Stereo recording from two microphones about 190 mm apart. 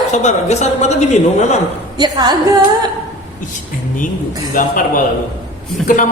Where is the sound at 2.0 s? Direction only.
20° right (ahead or behind).